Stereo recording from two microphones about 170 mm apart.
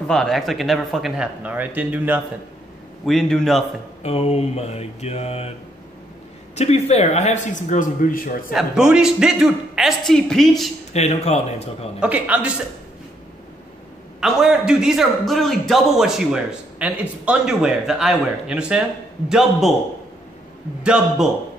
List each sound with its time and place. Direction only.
0.1 s a man's voice: centre (ahead or behind)
3.1 s a man's voice: 5° left (ahead or behind)
4.0 s speech: 35° left (ahead or behind)
6.5 s speech: 40° left (ahead or behind)
8.5 s a man's voice: 5° right (ahead or behind)
10.9 s speech: 40° left (ahead or behind)
12.0 s a man's voice: 10° right (ahead or behind)
14.2 s a man's voice: 5° right (ahead or behind)
20.8 s a man's voice: 5° right (ahead or behind)